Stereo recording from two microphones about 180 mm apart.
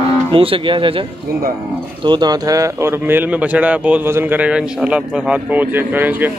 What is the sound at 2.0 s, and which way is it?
A man's voice, 25° right (ahead or behind).